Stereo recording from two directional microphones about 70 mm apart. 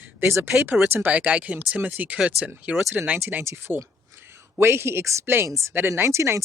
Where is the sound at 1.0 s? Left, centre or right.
Centre.